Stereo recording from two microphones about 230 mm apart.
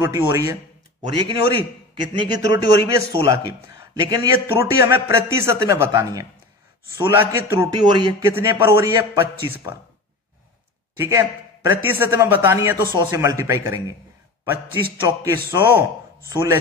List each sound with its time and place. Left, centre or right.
0.0 s a man's voice: centre
2.1 s a man's voice: centre
11.0 s a man's voice: centre